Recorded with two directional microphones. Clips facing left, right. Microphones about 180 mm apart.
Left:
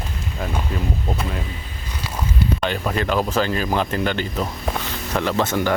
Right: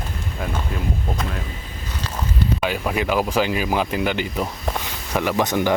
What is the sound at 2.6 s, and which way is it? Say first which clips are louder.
Speech: even; 10° right (ahead or behind).